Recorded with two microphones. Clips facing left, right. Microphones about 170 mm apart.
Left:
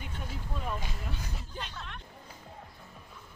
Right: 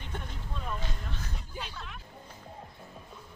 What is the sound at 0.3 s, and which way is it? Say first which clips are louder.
Vehicle: left 5 dB; 5° left (ahead or behind).